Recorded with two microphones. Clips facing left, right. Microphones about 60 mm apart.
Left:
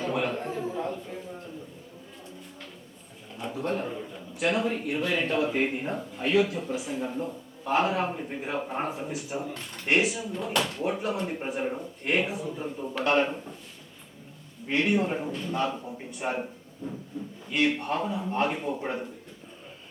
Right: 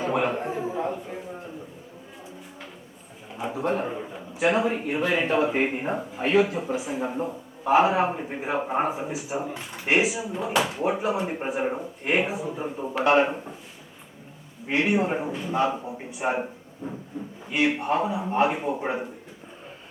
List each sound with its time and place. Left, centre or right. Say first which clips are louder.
0.0 s a sound: right 4 dB; right
3.6 s a man's voice: right 4 dB; right
8.9 s a man's voice: right 4 dB; centre
14.7 s speech: right 2 dB; centre
17.5 s speech: right 3 dB; centre